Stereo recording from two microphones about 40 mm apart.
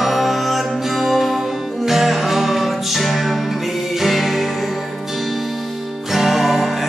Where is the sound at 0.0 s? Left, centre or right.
Centre.